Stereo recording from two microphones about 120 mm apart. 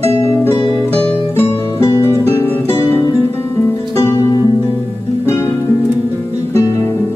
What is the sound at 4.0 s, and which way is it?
Music, 25° left (ahead or behind).